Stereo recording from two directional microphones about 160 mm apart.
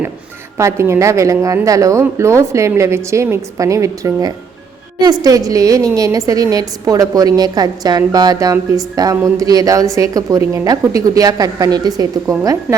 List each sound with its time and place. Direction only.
0.5 s a woman's voice: 15° right (ahead or behind)